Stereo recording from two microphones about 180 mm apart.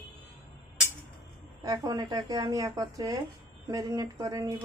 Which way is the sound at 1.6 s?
20° right (ahead or behind).